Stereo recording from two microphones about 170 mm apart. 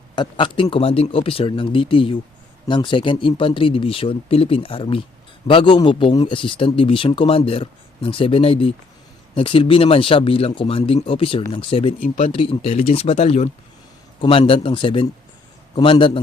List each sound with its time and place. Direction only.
0.2 s speech: 30° left (ahead or behind)
11.9 s speech: 50° left (ahead or behind)
12.3 s speech: 35° left (ahead or behind)